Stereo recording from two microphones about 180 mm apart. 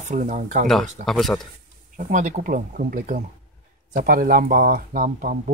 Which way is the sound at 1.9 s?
45° right (ahead or behind).